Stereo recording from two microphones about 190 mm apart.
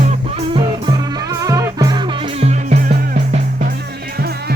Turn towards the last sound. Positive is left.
turn(degrees=-55)  # may be behind; listen again after turning